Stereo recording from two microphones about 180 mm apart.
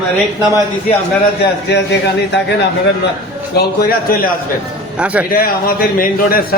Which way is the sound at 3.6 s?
55° left (ahead or behind).